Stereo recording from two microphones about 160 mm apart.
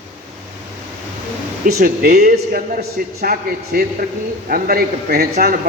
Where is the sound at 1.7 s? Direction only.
65° right (ahead or behind).